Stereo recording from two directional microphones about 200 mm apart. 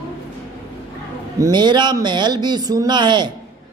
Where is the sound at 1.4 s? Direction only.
20° right (ahead or behind).